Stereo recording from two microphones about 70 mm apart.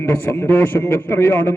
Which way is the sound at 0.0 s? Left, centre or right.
Left.